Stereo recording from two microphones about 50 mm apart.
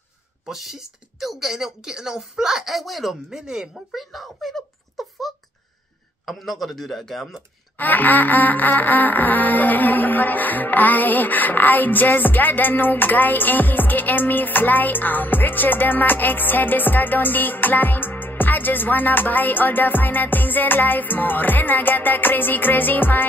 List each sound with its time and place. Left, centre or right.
0.5 s speech: centre
7.7 s music: left